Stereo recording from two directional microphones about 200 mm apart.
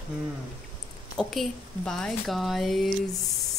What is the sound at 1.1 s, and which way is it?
Speech, centre (ahead or behind).